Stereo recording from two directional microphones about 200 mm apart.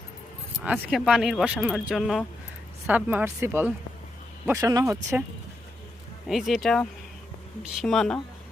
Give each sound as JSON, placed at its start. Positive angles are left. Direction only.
{"t": 0.6, "sound": "speech", "side_deg": -5}
{"t": 6.2, "sound": "speech", "side_deg": 0}